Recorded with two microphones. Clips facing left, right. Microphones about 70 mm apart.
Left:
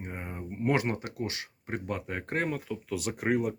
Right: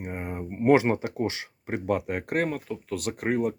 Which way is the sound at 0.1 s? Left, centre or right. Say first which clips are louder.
Right 7 dB; right.